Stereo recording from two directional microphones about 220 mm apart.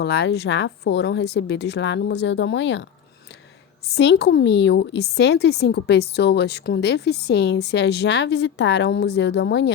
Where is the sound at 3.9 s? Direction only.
50° left (ahead or behind).